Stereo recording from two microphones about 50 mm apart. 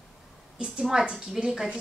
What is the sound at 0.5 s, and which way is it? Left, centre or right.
A woman's voice, centre.